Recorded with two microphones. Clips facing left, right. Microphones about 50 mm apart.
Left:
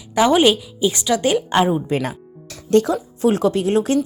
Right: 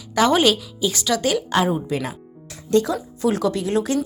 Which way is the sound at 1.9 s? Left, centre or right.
Left.